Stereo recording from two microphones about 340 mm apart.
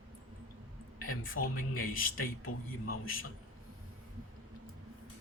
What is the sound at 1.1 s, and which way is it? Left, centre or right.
Speech, left.